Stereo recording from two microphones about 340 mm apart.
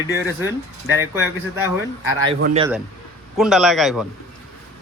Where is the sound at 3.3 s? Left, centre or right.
Centre.